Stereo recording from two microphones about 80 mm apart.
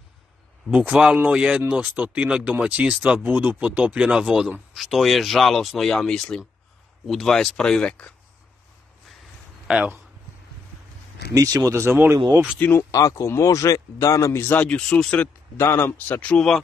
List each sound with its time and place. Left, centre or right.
0.7 s speech: centre
9.7 s speech: centre
11.3 s speech: right
12.5 s speech: left
12.9 s speech: left
14.4 s speech: left
14.7 s speech: centre
15.5 s speech: left
16.2 s speech: centre